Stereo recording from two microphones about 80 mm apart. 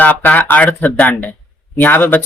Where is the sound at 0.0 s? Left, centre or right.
Centre.